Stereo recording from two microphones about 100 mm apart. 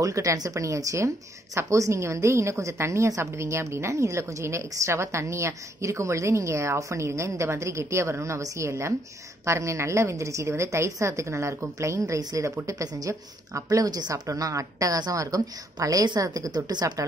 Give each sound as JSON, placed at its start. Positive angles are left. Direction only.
{"t": 0.0, "sound": "a woman's voice", "side_deg": -30}